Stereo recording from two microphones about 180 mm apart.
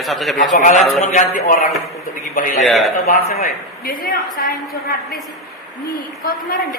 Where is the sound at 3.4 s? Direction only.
55° left (ahead or behind).